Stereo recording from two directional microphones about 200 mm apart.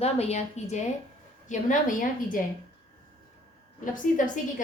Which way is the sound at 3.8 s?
40° left (ahead or behind).